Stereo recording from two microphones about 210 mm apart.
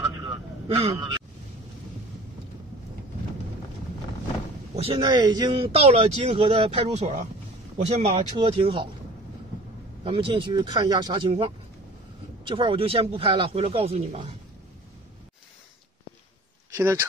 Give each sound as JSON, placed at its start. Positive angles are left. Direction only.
{"t": 0.2, "sound": "vehicle", "side_deg": -25}
{"t": 4.7, "sound": "speech", "side_deg": -25}
{"t": 10.0, "sound": "speech", "side_deg": -25}
{"t": 16.7, "sound": "speech", "side_deg": -15}